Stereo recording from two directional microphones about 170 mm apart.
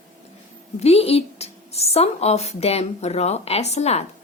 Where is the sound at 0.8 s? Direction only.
35° left (ahead or behind).